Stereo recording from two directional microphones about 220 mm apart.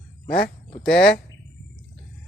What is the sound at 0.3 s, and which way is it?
Speech, 40° left (ahead or behind).